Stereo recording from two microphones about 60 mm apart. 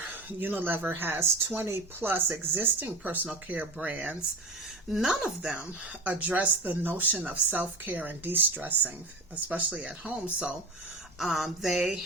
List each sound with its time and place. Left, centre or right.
0.1 s speech: right
4.9 s speech: centre
6.1 s speech: right
11.2 s a sound: centre